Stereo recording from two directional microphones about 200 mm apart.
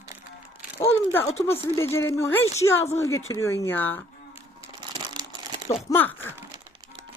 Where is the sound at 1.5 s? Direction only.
10° left (ahead or behind).